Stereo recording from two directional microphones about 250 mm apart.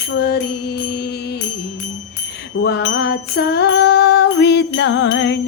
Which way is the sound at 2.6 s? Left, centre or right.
Left.